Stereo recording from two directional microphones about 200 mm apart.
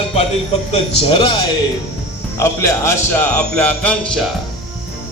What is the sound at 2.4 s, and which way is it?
A man's voice, 15° left (ahead or behind).